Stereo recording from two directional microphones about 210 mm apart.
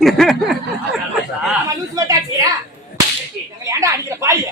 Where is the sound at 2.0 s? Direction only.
15° right (ahead or behind).